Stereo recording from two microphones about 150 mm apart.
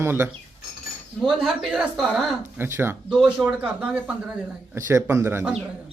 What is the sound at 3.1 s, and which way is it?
Speech, 5° right (ahead or behind).